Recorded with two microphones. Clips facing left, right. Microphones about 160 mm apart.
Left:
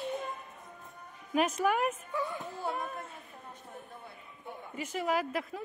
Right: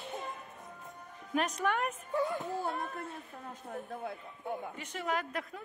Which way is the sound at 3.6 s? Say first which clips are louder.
Right 10 dB; 45° right (ahead or behind).